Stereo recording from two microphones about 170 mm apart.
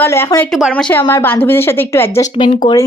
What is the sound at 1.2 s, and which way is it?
A woman's voice, 10° left (ahead or behind).